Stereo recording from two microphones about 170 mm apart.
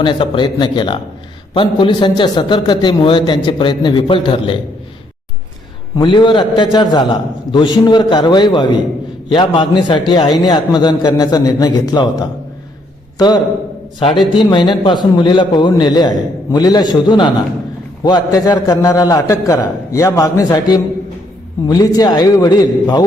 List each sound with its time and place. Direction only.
0.0 s a man's voice: 30° left (ahead or behind)
6.0 s a man's voice: 30° left (ahead or behind)
13.1 s a man's voice: 25° left (ahead or behind)